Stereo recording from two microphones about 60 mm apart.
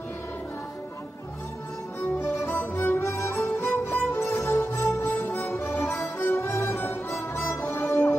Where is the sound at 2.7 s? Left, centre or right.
Left.